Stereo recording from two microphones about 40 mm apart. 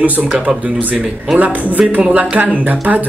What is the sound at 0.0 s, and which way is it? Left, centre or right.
Speech, right.